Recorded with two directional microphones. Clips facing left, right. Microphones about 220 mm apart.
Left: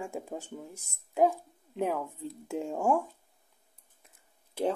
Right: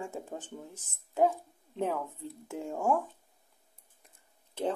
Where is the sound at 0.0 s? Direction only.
10° left (ahead or behind).